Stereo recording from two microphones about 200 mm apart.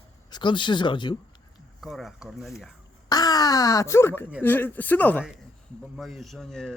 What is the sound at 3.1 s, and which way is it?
A man's voice, 20° left (ahead or behind).